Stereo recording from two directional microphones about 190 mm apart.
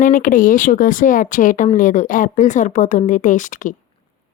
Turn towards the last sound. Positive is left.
turn(degrees=45)  # may be behind; listen again after turning